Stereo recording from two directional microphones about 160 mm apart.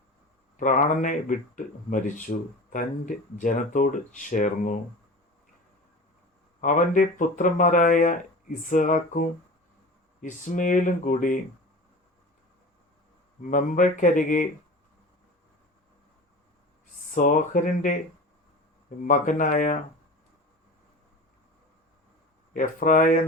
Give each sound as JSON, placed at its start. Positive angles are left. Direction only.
{"t": 0.5, "sound": "speech", "side_deg": 55}
{"t": 6.6, "sound": "speech", "side_deg": 55}
{"t": 13.4, "sound": "speech", "side_deg": 50}
{"t": 17.1, "sound": "speech", "side_deg": 55}
{"t": 19.0, "sound": "speech", "side_deg": 55}
{"t": 22.5, "sound": "speech", "side_deg": 55}